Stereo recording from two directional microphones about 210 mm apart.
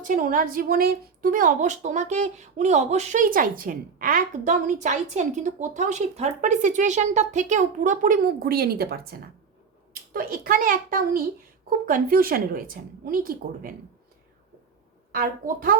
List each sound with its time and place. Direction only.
0.0 s a woman's voice: 40° right (ahead or behind)
15.1 s a woman's voice: 40° right (ahead or behind)